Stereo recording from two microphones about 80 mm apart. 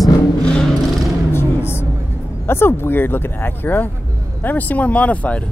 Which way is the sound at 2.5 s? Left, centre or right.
Left.